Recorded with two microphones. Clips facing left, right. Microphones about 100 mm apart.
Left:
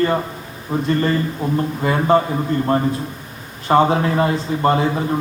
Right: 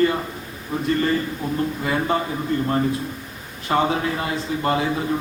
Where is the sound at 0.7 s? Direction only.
35° left (ahead or behind).